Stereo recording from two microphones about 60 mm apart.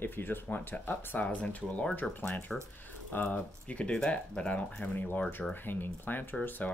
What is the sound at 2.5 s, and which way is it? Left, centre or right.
Speech, centre.